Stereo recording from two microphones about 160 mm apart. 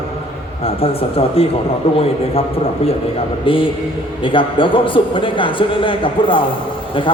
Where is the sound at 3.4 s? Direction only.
35° left (ahead or behind).